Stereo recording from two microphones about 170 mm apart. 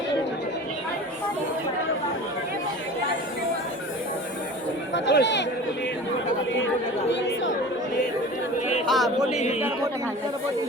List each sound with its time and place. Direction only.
4.9 s speech: 90° left
8.9 s speech: centre (ahead or behind)
9.3 s a man's voice: 40° left (ahead or behind)